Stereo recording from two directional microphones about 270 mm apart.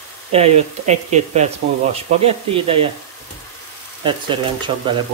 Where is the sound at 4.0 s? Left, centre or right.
Centre.